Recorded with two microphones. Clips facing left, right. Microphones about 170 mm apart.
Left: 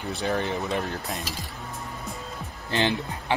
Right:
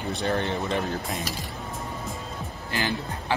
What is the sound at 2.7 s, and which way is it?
Speech, 20° left (ahead or behind).